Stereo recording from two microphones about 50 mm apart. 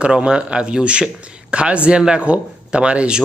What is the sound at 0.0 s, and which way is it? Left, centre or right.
Speech, centre.